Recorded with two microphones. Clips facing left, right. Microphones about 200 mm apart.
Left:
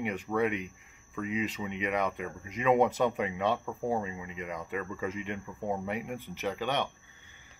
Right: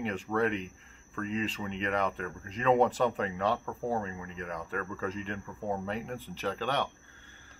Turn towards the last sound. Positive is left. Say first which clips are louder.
# even
turn(degrees=20)  # may be behind; listen again after turning